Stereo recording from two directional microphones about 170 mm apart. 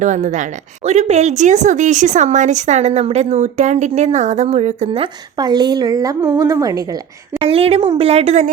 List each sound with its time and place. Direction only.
0.0 s a woman's voice: 45° right (ahead or behind); by 6.8 s 20° right (ahead or behind)
7.3 s speech: 35° right (ahead or behind)